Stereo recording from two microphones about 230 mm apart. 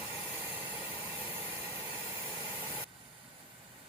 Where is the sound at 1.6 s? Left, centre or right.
Centre.